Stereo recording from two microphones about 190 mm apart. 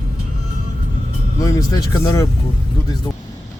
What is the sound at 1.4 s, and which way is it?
Speech, 15° left (ahead or behind).